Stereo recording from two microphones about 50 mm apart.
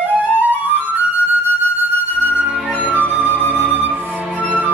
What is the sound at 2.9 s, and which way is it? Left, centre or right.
Flute, right.